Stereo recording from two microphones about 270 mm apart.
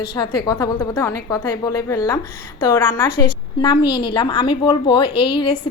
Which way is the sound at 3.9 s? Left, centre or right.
Left.